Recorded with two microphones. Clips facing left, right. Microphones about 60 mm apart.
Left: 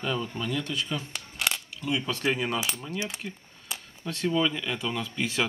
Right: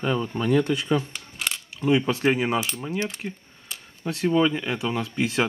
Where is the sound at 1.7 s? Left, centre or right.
Right.